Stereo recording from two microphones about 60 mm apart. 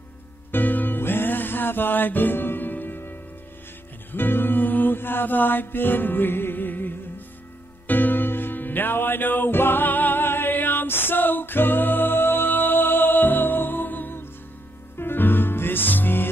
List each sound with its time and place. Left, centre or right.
0.5 s music: left